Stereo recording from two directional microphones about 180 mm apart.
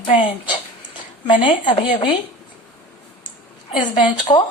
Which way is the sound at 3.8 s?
25° left (ahead or behind).